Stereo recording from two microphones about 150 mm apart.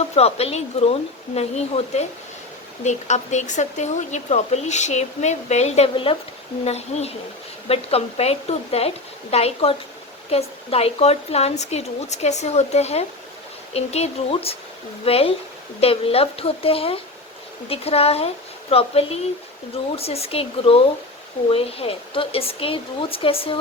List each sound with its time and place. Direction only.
0.2 s speech: 45° left (ahead or behind)